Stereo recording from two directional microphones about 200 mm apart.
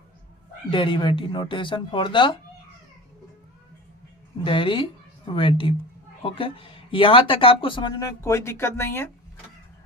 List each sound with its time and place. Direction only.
0.7 s speech: 25° left (ahead or behind)
4.4 s a woman's voice: 25° left (ahead or behind)